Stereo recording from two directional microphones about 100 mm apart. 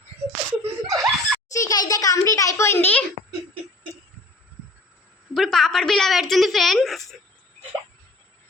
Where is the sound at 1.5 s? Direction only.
40° left (ahead or behind); by 3.1 s 20° left (ahead or behind).